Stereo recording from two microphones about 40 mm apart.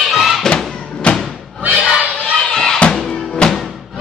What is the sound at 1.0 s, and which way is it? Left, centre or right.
Thump, left.